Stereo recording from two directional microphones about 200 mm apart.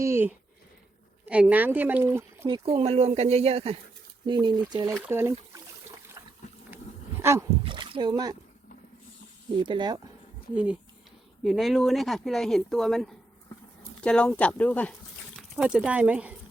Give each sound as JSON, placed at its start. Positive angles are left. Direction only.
{"t": 0.0, "sound": "speech", "side_deg": -10}
{"t": 2.6, "sound": "speech", "side_deg": -30}
{"t": 5.0, "sound": "speech", "side_deg": -10}
{"t": 7.2, "sound": "speech", "side_deg": -15}
{"t": 7.6, "sound": "a sound", "side_deg": -25}
{"t": 9.6, "sound": "speech", "side_deg": -25}
{"t": 11.4, "sound": "speech", "side_deg": 0}
{"t": 15.4, "sound": "speech", "side_deg": -5}